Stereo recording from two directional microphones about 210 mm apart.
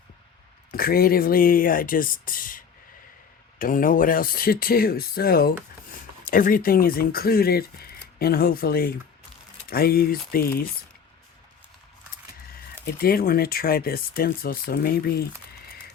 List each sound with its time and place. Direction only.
0.7 s speech: 45° left (ahead or behind)
12.8 s speech: 45° left (ahead or behind)